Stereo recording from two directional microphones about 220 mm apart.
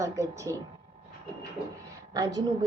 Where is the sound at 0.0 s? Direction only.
15° right (ahead or behind).